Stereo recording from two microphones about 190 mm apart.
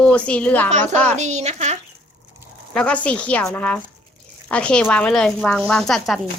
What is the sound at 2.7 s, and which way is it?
A woman's voice, 5° left (ahead or behind).